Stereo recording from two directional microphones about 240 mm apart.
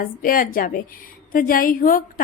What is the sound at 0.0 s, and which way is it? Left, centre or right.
A woman's voice, left.